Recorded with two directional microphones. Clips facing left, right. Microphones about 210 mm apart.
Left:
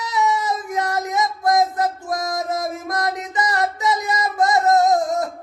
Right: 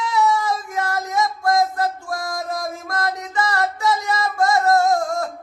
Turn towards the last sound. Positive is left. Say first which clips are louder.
# left 2 dB
turn(degrees=20)  # may be behind; listen again after turning